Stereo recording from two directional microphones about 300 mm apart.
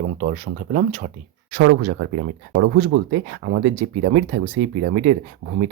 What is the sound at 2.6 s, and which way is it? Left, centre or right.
Speech, right.